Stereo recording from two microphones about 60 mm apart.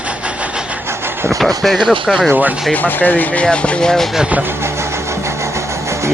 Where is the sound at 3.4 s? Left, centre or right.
Centre.